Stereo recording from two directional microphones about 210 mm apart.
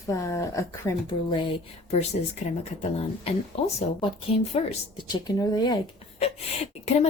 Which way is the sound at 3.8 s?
25° left (ahead or behind).